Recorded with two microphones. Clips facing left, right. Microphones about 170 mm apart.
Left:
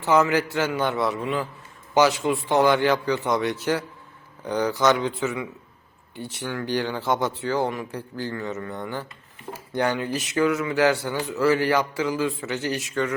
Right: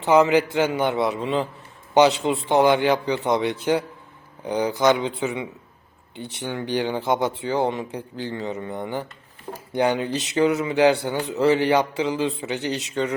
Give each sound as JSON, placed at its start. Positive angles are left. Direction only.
{"t": 0.2, "sound": "speech", "side_deg": -20}